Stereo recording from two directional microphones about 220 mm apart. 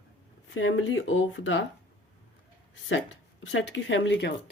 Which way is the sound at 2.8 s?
60° left (ahead or behind).